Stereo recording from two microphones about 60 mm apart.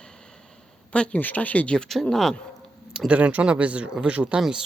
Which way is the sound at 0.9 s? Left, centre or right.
Centre.